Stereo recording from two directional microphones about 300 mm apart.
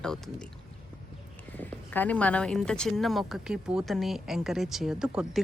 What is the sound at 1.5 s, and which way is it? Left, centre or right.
Speech, centre.